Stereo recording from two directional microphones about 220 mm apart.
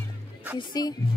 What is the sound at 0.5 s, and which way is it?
Speech, 20° left (ahead or behind).